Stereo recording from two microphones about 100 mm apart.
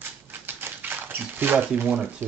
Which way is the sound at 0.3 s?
20° right (ahead or behind).